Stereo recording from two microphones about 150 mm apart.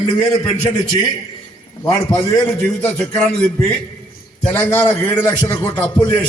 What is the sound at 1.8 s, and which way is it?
Speech, 25° left (ahead or behind).